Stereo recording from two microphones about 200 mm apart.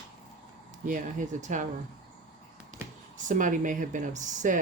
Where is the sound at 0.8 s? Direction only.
40° right (ahead or behind).